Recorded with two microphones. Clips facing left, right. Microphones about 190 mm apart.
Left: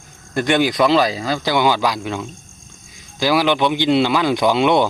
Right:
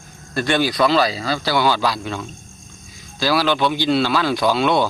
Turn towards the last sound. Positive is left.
turn(degrees=20)  # may be behind; listen again after turning